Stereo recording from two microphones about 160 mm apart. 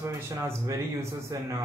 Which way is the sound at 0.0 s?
15° right (ahead or behind).